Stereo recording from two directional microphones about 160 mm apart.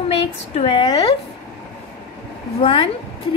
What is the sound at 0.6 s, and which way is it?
Speech, 30° left (ahead or behind).